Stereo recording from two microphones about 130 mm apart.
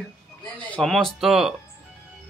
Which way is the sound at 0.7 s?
5° left (ahead or behind).